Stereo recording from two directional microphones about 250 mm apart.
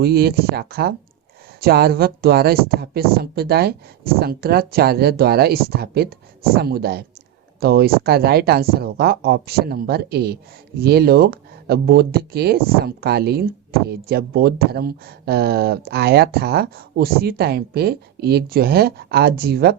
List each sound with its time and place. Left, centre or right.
0.0 s speech: right